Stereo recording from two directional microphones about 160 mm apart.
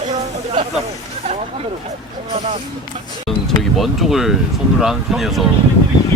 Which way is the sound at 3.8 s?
Centre (ahead or behind).